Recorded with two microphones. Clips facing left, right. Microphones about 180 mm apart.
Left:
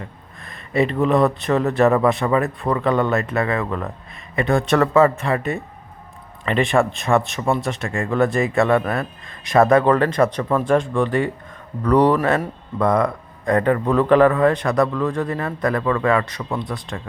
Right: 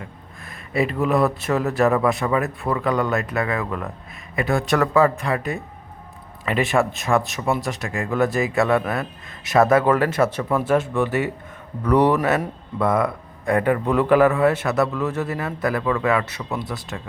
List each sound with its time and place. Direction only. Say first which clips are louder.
0.0 s speech: left 1 dB; centre (ahead or behind)